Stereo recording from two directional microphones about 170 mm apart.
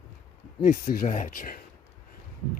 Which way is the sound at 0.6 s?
50° left (ahead or behind).